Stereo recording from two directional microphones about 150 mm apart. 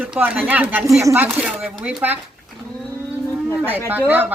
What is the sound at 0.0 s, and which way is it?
A man's voice, 10° right (ahead or behind).